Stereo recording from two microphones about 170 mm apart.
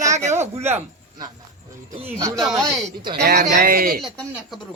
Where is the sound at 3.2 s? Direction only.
65° right (ahead or behind).